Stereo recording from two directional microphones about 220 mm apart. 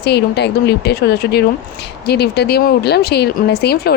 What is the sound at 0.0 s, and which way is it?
Speech, 50° left (ahead or behind).